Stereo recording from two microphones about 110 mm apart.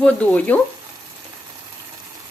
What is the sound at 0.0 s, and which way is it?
Speech, 10° left (ahead or behind).